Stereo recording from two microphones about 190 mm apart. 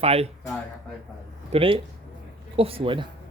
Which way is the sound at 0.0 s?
30° right (ahead or behind).